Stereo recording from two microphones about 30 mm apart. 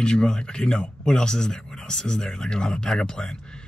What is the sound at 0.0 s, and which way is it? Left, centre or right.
Speech, left.